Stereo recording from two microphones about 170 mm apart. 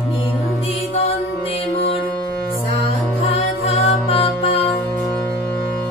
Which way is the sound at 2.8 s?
35° left (ahead or behind).